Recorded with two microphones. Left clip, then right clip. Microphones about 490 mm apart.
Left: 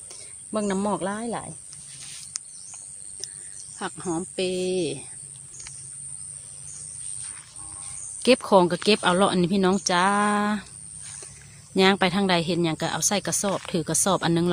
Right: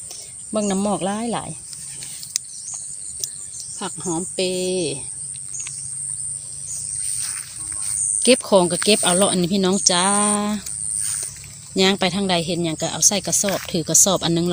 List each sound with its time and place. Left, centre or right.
0.1 s speech: left
3.2 s a sound: left
3.8 s speech: left
5.5 s bird: left
8.2 s speech: left
11.7 s speech: left